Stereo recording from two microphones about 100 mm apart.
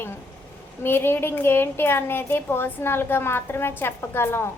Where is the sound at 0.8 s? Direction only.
25° left (ahead or behind).